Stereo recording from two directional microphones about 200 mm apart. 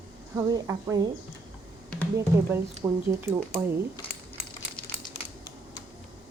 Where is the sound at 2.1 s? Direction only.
15° right (ahead or behind).